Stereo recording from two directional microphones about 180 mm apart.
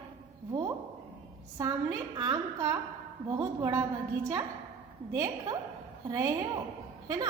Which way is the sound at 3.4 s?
15° right (ahead or behind).